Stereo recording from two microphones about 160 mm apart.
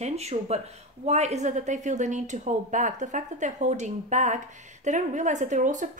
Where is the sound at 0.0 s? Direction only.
40° right (ahead or behind).